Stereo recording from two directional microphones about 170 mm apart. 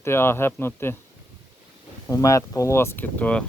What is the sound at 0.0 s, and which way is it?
Speech, 15° left (ahead or behind).